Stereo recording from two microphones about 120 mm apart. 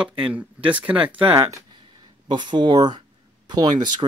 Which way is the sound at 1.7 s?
40° right (ahead or behind).